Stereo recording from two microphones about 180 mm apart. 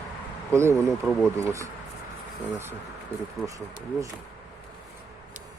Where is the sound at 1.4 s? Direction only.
15° right (ahead or behind).